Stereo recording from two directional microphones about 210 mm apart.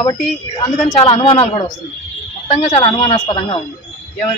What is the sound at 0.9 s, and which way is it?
Speech, 25° left (ahead or behind).